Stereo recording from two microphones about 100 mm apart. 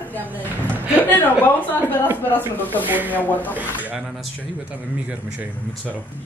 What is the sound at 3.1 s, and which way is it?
Speech, 15° left (ahead or behind).